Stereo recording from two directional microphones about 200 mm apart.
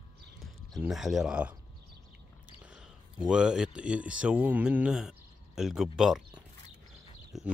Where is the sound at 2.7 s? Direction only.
5° right (ahead or behind).